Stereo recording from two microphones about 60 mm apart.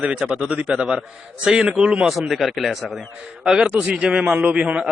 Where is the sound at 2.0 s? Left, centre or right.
Centre.